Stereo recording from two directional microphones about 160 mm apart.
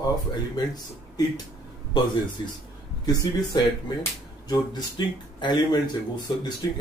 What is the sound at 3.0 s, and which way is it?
Speech, 25° left (ahead or behind).